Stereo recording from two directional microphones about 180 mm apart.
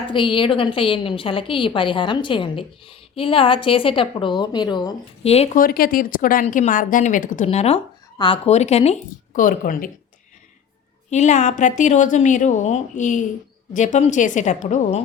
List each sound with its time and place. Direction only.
0.1 s a woman's voice: 30° left (ahead or behind)
5.2 s speech: 35° left (ahead or behind)
5.5 s a woman's voice: 55° left (ahead or behind)
11.1 s speech: 40° left (ahead or behind)